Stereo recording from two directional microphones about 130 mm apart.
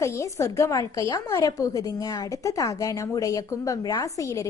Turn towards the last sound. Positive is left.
turn(degrees=25)  # may be behind; listen again after turning